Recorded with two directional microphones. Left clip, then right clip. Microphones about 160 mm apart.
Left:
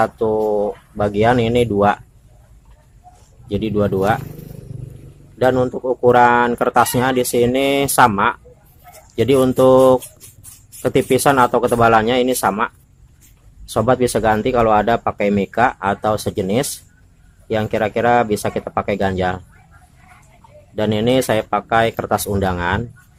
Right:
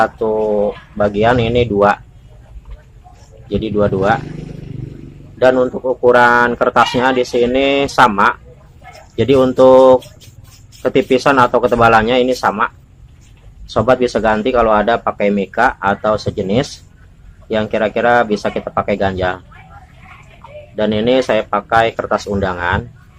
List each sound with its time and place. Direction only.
0.0 s speech: 75° left (ahead or behind)
3.5 s speech: 75° left (ahead or behind)
5.4 s speech: 75° left (ahead or behind)
20.7 s speech: 80° left